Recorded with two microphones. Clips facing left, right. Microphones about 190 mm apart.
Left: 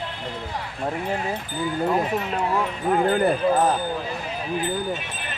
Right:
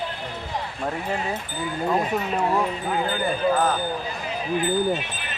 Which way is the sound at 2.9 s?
60° left (ahead or behind).